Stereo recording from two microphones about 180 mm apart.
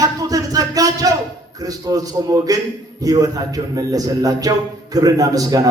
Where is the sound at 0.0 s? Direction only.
20° right (ahead or behind).